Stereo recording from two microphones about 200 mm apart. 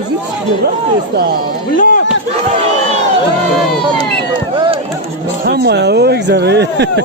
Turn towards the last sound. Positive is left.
turn(degrees=-55)  # may be behind; listen again after turning